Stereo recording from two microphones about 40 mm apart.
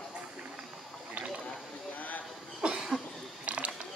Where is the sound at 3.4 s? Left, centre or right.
Right.